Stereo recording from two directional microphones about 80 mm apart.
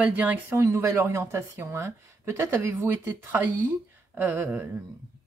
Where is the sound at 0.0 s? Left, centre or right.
Centre.